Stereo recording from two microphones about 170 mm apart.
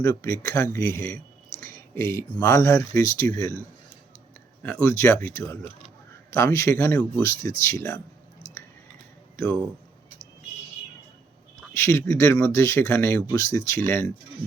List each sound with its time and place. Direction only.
0.0 s speech: 15° left (ahead or behind)
4.6 s speech: 10° left (ahead or behind)
6.3 s speech: 15° left (ahead or behind)
11.7 s speech: 15° left (ahead or behind)